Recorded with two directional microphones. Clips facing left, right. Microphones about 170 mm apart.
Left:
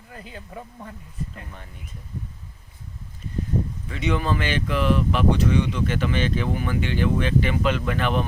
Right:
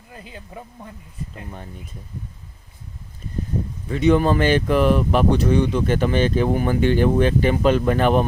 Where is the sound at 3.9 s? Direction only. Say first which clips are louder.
Right 8 dB; 40° right (ahead or behind).